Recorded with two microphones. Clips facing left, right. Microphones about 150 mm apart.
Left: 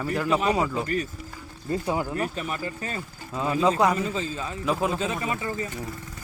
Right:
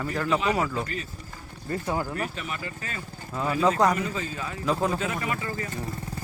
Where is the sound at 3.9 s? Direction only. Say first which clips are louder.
Left 2 dB; 25° left (ahead or behind).